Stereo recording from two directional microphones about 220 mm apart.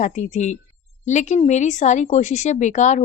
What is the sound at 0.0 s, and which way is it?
Speech, 35° left (ahead or behind).